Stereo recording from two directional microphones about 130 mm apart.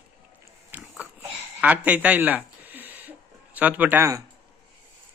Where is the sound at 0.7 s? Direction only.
10° right (ahead or behind).